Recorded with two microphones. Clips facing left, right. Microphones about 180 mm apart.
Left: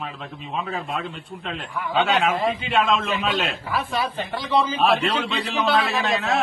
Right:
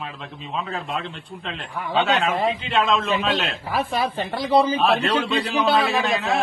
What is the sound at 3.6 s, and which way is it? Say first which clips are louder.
Speech: right 2 dB; 35° right (ahead or behind).